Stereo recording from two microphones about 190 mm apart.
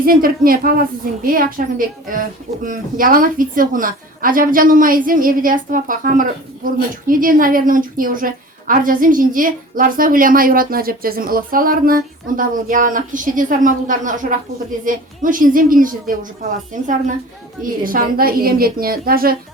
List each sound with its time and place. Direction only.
0.0 s a woman's voice: 50° right (ahead or behind)